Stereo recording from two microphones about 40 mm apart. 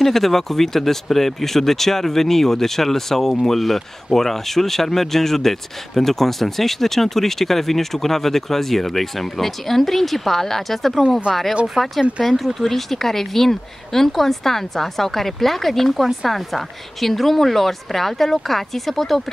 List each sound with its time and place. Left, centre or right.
0.0 s speech: centre